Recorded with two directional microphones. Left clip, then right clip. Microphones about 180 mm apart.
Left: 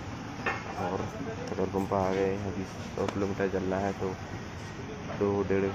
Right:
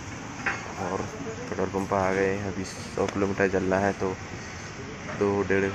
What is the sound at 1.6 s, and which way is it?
Speech, centre (ahead or behind).